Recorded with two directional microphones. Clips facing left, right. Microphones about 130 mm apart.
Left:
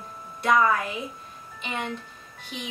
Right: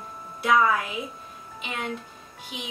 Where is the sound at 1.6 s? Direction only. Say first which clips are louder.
Left 1 dB; 5° right (ahead or behind).